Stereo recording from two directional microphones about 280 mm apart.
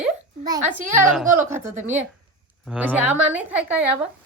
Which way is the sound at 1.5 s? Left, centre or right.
Centre.